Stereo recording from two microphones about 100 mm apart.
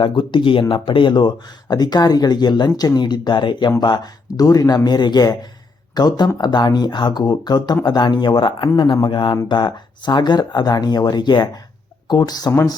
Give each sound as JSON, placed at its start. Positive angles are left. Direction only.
{"t": 0.0, "sound": "speech", "side_deg": 55}